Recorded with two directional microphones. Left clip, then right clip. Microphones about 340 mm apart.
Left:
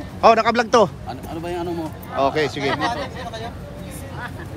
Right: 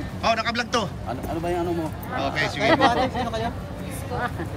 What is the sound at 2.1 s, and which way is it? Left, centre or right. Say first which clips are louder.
Speech: left 6 dB; centre.